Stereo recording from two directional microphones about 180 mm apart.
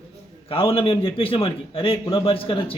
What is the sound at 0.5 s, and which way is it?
A man's voice, 30° left (ahead or behind).